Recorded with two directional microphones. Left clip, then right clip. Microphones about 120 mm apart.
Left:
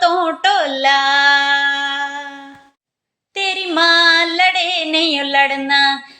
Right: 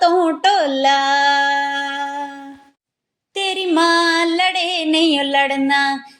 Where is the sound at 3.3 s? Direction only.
35° right (ahead or behind).